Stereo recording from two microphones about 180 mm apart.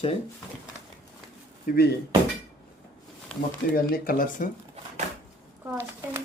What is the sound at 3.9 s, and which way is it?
Speech, 55° left (ahead or behind).